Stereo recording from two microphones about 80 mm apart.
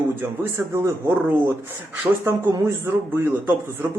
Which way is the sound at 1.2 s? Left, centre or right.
Right.